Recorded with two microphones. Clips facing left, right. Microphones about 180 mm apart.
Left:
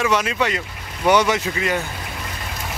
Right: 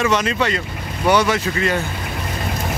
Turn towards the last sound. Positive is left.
turn(degrees=15)  # may be behind; listen again after turning